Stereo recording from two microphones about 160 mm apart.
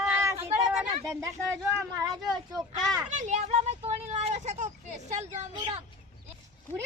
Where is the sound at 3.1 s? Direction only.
50° right (ahead or behind).